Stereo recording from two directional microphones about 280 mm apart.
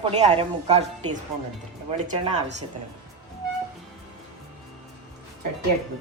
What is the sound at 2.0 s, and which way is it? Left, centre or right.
Speech, right.